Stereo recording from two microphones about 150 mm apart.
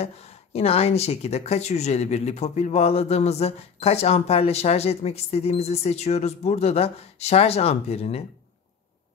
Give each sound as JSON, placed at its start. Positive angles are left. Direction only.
{"t": 0.0, "sound": "speech", "side_deg": 45}